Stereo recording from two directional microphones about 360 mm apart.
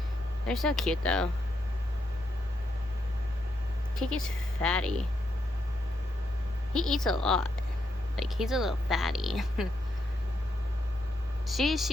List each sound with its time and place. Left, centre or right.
0.4 s speech: centre
3.9 s a woman's voice: centre
6.7 s speech: centre
11.4 s speech: centre